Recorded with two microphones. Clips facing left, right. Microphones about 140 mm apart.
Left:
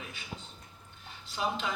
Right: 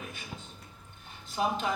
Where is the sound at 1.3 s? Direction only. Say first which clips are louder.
Right 3 dB; 45° right (ahead or behind).